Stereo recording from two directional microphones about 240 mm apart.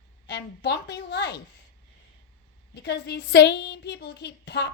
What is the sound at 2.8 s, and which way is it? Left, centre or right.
A woman's voice, left.